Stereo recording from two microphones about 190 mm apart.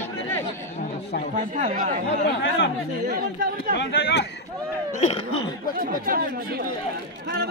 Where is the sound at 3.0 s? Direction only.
50° right (ahead or behind).